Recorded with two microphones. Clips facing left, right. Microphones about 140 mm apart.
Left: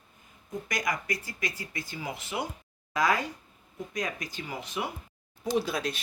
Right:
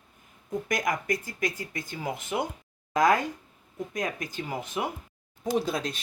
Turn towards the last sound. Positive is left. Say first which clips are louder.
# right 1 dB
turn(degrees=-45)  # may be behind; listen again after turning